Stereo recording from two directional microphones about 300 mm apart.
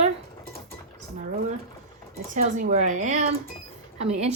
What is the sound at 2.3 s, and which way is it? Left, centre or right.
Speech, right.